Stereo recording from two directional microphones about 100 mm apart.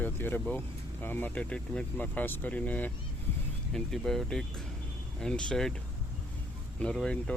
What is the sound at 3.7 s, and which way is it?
Speech, 5° left (ahead or behind).